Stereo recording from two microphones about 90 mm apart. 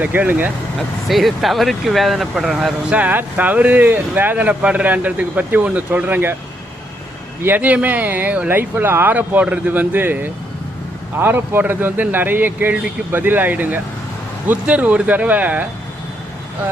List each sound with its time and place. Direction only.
0.0 s speech: 20° right (ahead or behind)
1.0 s speech: centre (ahead or behind)
2.9 s speech: 20° right (ahead or behind)
7.4 s speech: 20° right (ahead or behind)